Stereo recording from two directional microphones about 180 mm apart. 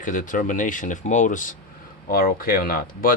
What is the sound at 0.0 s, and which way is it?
Speech, 45° left (ahead or behind).